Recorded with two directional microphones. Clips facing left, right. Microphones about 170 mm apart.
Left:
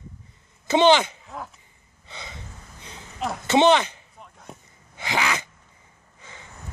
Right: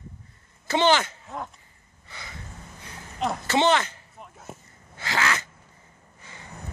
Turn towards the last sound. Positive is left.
turn(degrees=15)  # may be behind; listen again after turning